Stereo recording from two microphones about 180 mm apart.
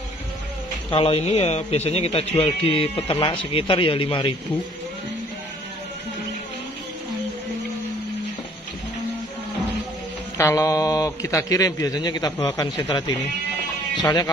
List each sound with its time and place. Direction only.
0.8 s a man's voice: 30° left (ahead or behind)
10.3 s a man's voice: 15° left (ahead or behind)